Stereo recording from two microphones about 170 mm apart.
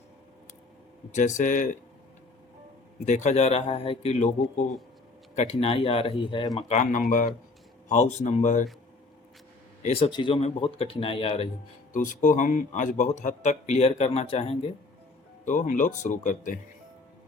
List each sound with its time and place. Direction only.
1.1 s speech: 45° left (ahead or behind)
3.1 s speech: 45° left (ahead or behind); by 6.5 s 30° left (ahead or behind)
6.6 s speech: 40° left (ahead or behind)
9.8 s speech: 35° left (ahead or behind)
11.9 s speech: 50° left (ahead or behind); by 14.7 s 35° left (ahead or behind)
15.4 s speech: 45° left (ahead or behind)